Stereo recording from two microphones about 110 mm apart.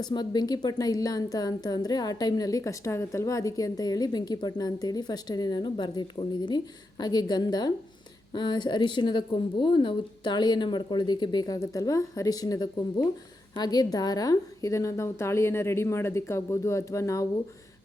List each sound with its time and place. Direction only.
0.0 s a woman's voice: 40° left (ahead or behind)